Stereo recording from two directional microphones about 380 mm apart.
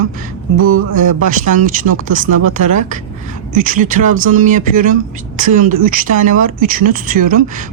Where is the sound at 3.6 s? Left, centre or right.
Right.